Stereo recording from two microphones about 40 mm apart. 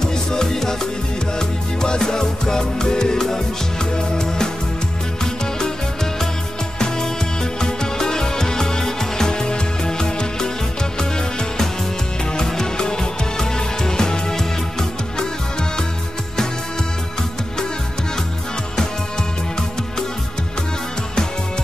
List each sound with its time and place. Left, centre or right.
0.0 s music: centre
5.2 s music: centre
7.6 s music: centre